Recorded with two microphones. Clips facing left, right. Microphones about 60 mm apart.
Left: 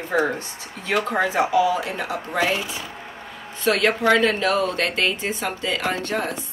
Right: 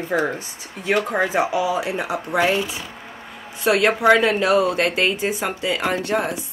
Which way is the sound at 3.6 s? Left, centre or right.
Centre.